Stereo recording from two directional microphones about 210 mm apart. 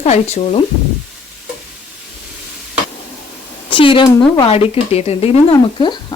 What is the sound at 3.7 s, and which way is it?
Speech, 25° left (ahead or behind).